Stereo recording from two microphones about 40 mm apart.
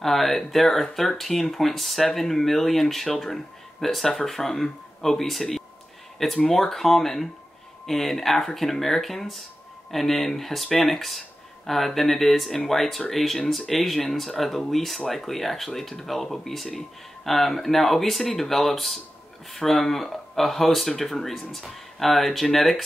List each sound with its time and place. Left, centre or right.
0.0 s speech: centre